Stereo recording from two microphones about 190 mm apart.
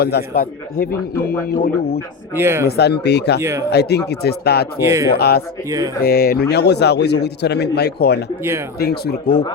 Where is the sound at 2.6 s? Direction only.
60° left (ahead or behind).